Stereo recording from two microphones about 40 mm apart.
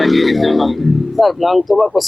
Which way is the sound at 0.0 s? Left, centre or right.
Centre.